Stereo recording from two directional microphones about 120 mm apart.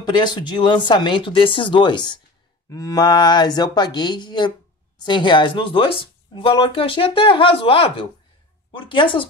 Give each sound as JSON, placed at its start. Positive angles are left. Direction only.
{"t": 0.0, "sound": "speech", "side_deg": 35}